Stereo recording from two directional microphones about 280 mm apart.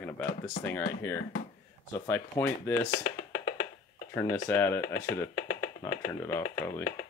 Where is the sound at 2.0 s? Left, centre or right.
Centre.